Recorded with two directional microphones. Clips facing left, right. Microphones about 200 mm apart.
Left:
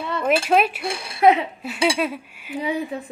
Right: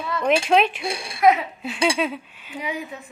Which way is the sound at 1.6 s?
5° left (ahead or behind).